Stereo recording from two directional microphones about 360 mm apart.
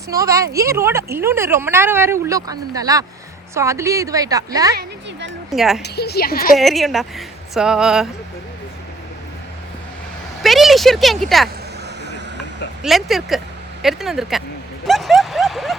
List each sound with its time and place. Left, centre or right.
0.1 s speech: centre
4.7 s speech: right
5.5 s speech: centre
5.8 s a woman's voice: left
6.6 s speech: centre
10.4 s speech: centre
12.8 s speech: centre